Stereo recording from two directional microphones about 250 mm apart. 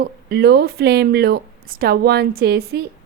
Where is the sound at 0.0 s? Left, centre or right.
Right.